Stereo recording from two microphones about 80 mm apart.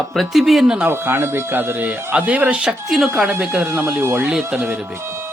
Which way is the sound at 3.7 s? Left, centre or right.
Right.